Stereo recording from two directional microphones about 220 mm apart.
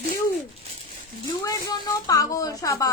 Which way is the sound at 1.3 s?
15° left (ahead or behind).